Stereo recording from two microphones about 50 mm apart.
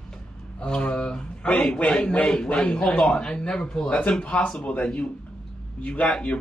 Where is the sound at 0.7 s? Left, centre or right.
Centre.